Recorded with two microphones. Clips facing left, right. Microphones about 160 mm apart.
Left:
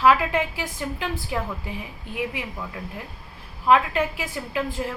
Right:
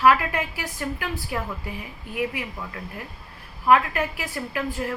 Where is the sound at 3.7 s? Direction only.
20° left (ahead or behind).